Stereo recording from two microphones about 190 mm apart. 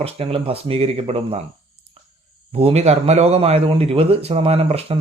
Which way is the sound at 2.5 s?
35° right (ahead or behind).